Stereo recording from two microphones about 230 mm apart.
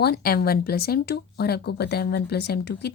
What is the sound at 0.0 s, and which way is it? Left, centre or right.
Speech, left.